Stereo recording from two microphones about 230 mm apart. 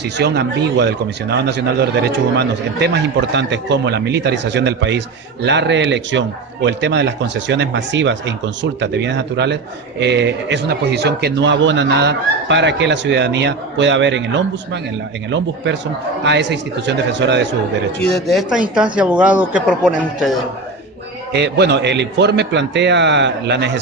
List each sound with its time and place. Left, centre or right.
0.0 s speech: right
18.0 s speech: centre
21.3 s speech: right